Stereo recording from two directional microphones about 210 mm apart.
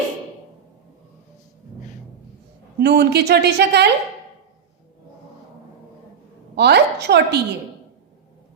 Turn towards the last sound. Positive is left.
turn(degrees=-50)  # may be behind; listen again after turning